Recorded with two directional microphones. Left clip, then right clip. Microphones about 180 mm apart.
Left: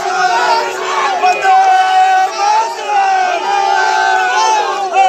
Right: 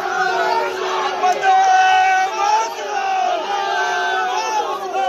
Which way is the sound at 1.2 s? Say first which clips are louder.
Left 4 dB; 40° left (ahead or behind).